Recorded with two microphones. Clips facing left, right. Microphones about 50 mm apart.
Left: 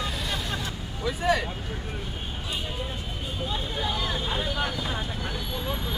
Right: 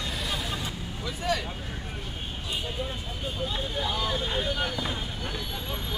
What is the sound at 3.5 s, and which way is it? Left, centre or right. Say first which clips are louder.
Vehicle: left 3 dB; centre.